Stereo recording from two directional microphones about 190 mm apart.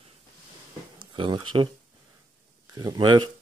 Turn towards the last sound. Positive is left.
turn(degrees=-25)  # may be behind; listen again after turning